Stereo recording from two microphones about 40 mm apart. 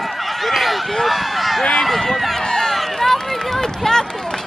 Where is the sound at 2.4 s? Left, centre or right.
Centre.